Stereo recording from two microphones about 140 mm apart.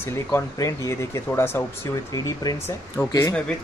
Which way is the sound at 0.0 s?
20° left (ahead or behind).